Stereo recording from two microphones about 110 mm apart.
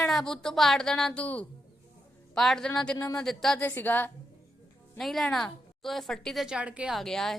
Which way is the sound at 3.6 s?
15° left (ahead or behind).